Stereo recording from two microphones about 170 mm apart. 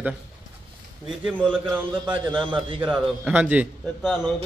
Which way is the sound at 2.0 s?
30° right (ahead or behind).